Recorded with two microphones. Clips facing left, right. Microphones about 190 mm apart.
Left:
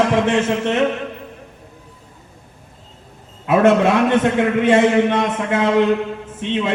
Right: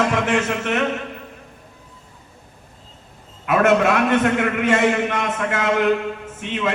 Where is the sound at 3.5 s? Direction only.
25° left (ahead or behind).